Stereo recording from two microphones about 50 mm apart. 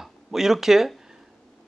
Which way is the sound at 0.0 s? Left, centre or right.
Centre.